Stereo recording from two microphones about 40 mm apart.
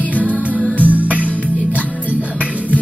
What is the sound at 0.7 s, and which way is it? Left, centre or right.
Music, right.